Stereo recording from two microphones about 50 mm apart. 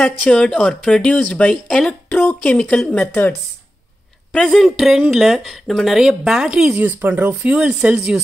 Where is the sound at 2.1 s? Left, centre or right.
Left.